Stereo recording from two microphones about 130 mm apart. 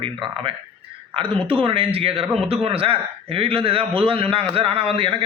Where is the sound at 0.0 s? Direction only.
40° right (ahead or behind).